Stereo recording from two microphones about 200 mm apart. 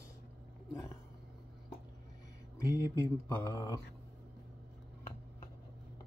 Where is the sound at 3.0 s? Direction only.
15° left (ahead or behind).